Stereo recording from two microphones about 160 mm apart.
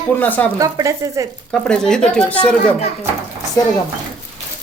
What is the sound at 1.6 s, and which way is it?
Speech, 5° left (ahead or behind).